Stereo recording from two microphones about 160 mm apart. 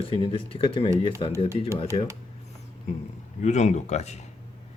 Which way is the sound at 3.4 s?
45° left (ahead or behind).